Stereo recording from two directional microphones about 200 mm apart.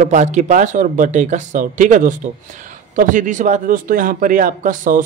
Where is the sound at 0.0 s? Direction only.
35° right (ahead or behind).